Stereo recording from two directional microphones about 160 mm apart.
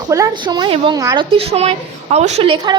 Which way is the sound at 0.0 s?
20° right (ahead or behind).